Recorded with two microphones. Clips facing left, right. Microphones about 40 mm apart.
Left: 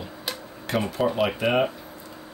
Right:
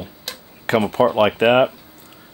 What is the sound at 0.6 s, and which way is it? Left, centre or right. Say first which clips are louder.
Speech: right 8 dB; right.